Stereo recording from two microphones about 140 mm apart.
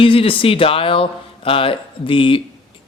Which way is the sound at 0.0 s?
40° left (ahead or behind).